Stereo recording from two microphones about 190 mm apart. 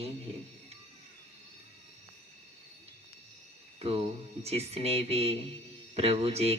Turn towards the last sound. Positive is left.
turn(degrees=-30)  # may be behind; listen again after turning